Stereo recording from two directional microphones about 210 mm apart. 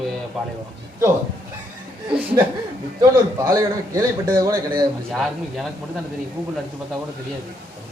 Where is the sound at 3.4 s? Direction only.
15° right (ahead or behind).